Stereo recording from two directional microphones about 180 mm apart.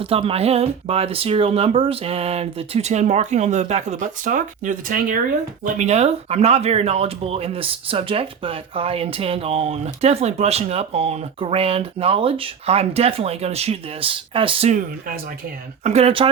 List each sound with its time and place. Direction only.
0.0 s speech: 30° right (ahead or behind)
14.7 s speech: 45° right (ahead or behind)
15.8 s speech: 35° right (ahead or behind)